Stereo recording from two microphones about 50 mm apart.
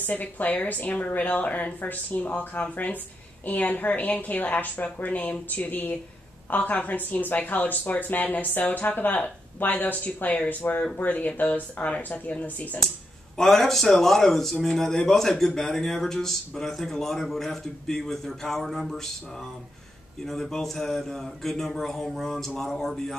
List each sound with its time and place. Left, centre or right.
0.0 s speech: left
10.0 s speech: left
13.4 s speech: centre
20.2 s speech: centre